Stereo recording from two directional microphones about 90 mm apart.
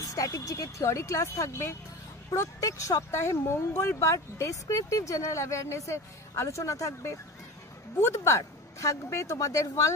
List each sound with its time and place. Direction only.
0.1 s speech: 40° left (ahead or behind)